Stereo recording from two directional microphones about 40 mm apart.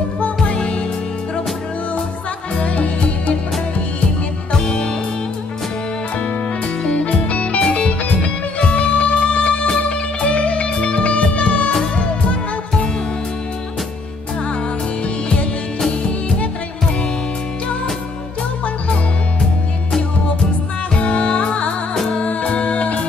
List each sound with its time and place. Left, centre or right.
0.5 s music: left
2.5 s music: left
4.5 s music: left
6.9 s music: left
20.9 s music: left
21.9 s music: centre
22.2 s music: left